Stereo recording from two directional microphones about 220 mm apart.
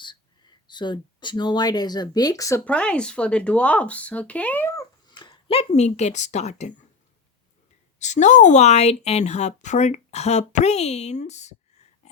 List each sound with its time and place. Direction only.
0.0 s speech: 20° left (ahead or behind)
7.9 s a woman's voice: 30° left (ahead or behind)